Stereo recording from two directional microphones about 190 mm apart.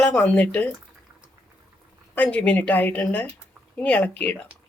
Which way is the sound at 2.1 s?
5° left (ahead or behind).